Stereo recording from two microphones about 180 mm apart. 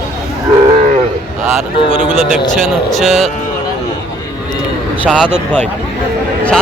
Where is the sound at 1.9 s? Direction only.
40° left (ahead or behind).